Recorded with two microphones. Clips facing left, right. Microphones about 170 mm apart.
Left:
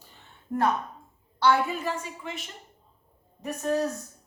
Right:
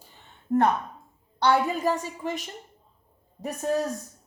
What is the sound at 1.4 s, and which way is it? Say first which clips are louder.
A woman's voice: right 1 dB; 40° right (ahead or behind).